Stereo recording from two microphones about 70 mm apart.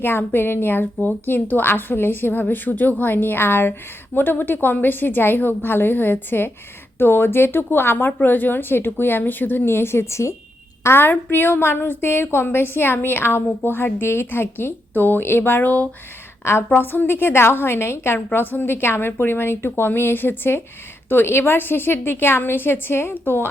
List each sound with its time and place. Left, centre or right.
0.0 s a woman's voice: left
16.4 s a woman's voice: left